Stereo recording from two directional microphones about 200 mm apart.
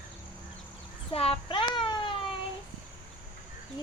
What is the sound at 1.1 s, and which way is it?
Child singing, 30° left (ahead or behind).